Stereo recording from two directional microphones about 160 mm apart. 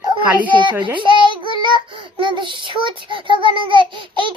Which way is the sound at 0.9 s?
30° right (ahead or behind).